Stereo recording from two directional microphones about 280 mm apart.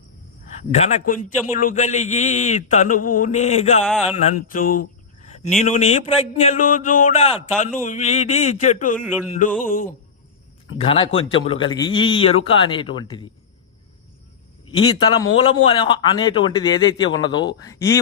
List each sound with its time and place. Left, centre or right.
0.7 s a man's voice: left
10.8 s a man's voice: centre
14.8 s a man's voice: centre